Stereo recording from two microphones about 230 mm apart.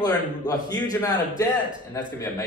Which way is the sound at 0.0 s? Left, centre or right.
Centre.